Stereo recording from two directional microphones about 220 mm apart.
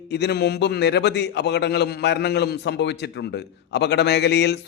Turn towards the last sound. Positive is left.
turn(degrees=50)  # may be behind; listen again after turning